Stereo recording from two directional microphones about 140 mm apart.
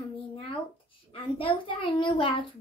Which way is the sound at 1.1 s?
40° left (ahead or behind).